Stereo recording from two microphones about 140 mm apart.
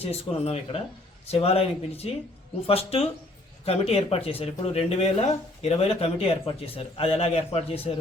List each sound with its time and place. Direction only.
0.0 s speech: 45° left (ahead or behind)